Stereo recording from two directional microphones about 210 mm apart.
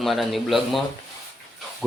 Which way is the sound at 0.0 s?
Centre (ahead or behind).